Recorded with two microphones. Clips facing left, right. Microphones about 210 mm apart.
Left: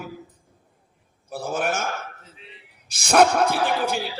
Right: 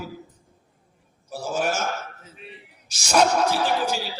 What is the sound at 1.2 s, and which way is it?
Speech, 55° left (ahead or behind).